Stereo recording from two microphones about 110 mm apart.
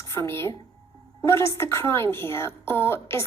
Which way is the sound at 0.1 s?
25° left (ahead or behind).